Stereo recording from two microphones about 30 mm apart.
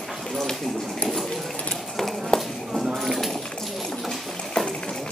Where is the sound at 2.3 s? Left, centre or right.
Left.